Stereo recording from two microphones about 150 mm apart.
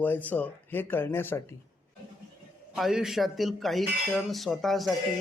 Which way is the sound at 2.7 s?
5° right (ahead or behind).